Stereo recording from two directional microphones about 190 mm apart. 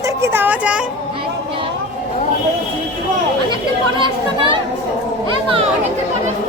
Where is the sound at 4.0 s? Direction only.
25° right (ahead or behind).